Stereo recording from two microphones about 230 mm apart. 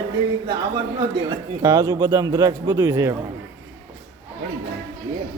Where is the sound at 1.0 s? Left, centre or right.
Centre.